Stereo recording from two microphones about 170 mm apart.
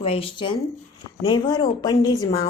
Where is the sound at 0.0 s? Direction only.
35° left (ahead or behind).